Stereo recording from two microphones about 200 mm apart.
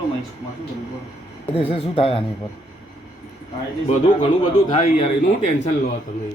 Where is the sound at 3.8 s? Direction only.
25° left (ahead or behind).